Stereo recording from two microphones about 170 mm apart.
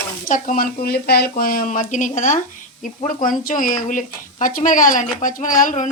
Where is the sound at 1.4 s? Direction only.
55° left (ahead or behind).